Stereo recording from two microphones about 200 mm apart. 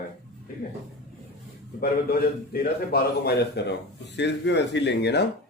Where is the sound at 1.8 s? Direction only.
50° left (ahead or behind).